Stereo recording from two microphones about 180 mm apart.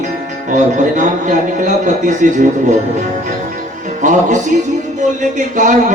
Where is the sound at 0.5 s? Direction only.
45° right (ahead or behind).